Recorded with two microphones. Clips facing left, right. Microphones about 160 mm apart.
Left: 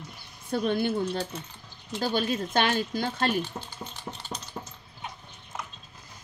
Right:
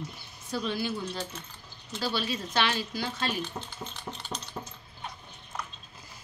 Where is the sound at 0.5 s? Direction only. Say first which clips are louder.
Left 5 dB; 55° left (ahead or behind).